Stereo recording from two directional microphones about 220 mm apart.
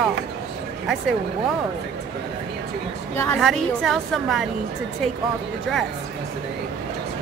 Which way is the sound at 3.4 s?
Centre (ahead or behind).